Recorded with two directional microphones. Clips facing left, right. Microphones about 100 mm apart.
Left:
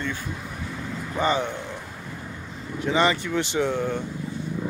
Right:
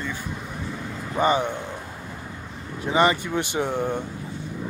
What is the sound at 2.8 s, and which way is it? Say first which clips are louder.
Speech: right 2 dB; 10° right (ahead or behind).